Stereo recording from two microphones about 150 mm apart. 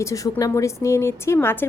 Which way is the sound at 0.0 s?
20° left (ahead or behind).